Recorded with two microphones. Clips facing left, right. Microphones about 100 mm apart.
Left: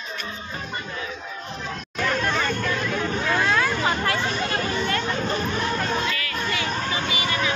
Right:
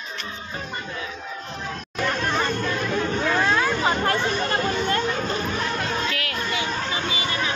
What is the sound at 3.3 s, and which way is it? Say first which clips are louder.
Speech: even; 15° right (ahead or behind).